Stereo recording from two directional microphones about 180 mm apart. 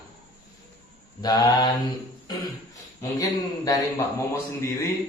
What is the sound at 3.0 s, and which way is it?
A man's voice, 20° left (ahead or behind).